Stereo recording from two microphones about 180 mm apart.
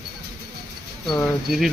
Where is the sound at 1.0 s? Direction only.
Centre (ahead or behind).